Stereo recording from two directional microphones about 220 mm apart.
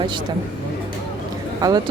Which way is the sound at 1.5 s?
15° right (ahead or behind).